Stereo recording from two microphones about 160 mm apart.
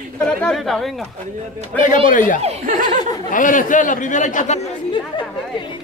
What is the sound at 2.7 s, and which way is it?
Speech, 60° right (ahead or behind).